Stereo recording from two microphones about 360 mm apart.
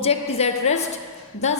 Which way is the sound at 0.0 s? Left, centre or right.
Centre.